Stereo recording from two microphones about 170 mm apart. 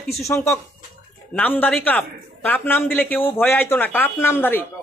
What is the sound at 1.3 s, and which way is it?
A man's voice, 10° left (ahead or behind).